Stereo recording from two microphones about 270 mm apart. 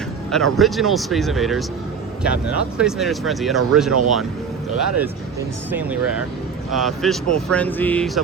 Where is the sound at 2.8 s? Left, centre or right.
Centre.